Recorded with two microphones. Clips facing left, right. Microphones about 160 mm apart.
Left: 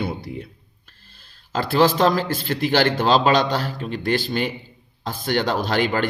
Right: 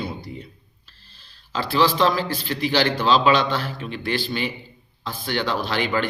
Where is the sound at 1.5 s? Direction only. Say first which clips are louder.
Left 2 dB; 45° left (ahead or behind).